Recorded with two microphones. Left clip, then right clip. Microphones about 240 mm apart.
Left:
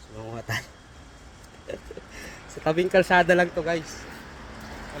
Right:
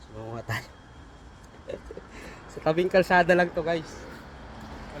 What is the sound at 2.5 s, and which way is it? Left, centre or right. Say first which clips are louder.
Speech: left 1 dB; centre.